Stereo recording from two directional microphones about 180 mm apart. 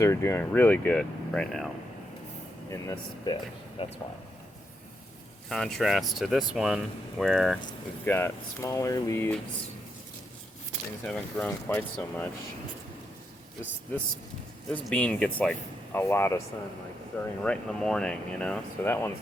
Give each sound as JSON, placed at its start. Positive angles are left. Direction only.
{"t": 0.0, "sound": "speech", "side_deg": 15}
{"t": 2.6, "sound": "speech", "side_deg": 15}
{"t": 5.5, "sound": "speech", "side_deg": 5}
{"t": 8.0, "sound": "speech", "side_deg": 10}
{"t": 11.0, "sound": "speech", "side_deg": 5}
{"t": 14.7, "sound": "speech", "side_deg": 5}
{"t": 17.4, "sound": "speech", "side_deg": 5}